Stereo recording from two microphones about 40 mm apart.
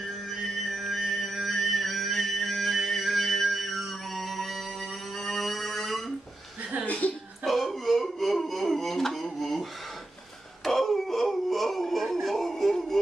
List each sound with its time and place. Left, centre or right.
0.3 s music: centre
6.9 s music: left
7.4 s a sound: centre